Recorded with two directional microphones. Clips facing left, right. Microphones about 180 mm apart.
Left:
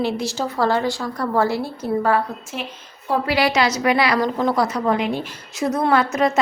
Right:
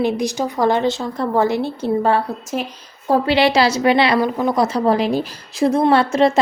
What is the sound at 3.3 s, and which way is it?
Speech, 25° right (ahead or behind).